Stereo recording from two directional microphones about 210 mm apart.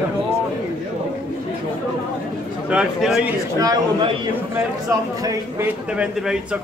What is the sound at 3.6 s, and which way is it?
Speech, 20° right (ahead or behind).